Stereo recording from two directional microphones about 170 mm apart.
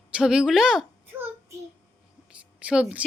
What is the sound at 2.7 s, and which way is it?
Speech, 5° right (ahead or behind).